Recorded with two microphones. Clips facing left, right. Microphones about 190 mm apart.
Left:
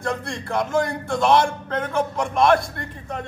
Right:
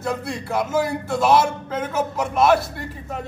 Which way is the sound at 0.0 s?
5° right (ahead or behind).